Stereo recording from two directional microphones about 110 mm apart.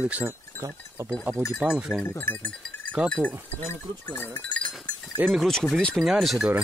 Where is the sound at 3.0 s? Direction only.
10° right (ahead or behind).